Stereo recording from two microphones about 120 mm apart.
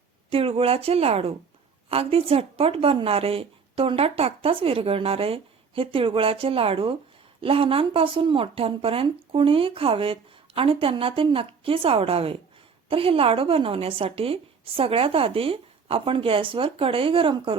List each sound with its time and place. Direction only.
0.3 s speech: 50° right (ahead or behind)